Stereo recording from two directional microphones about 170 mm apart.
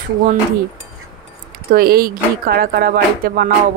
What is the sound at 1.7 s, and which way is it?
Speech, 60° right (ahead or behind).